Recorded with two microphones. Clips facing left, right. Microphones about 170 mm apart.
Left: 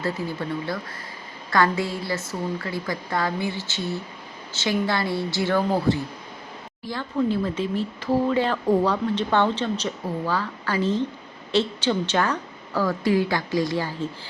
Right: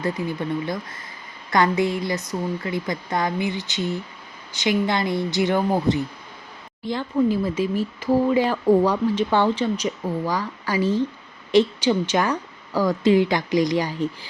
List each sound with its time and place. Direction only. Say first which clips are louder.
0.0 s speech: right 2 dB; 15° right (ahead or behind)
7.3 s speech: right 3 dB; 10° right (ahead or behind)